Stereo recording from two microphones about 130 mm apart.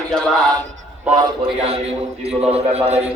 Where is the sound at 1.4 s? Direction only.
50° right (ahead or behind).